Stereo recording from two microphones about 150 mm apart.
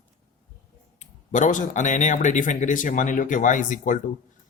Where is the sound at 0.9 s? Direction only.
55° left (ahead or behind).